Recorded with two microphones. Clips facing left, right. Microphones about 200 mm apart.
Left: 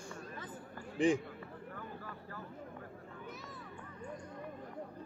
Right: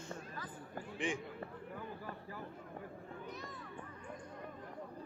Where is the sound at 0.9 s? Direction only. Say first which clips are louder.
Left 9 dB; 35° left (ahead or behind).